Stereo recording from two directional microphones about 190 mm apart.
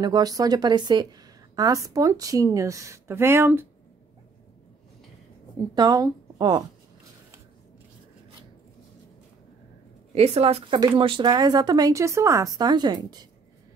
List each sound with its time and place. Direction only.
0.0 s a woman's voice: 20° right (ahead or behind)
5.8 s a woman's voice: 20° right (ahead or behind)
10.1 s speech: 30° right (ahead or behind)